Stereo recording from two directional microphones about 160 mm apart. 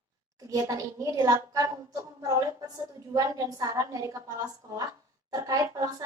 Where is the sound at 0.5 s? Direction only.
20° right (ahead or behind).